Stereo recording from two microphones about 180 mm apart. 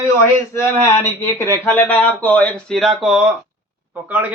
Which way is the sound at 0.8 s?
15° left (ahead or behind).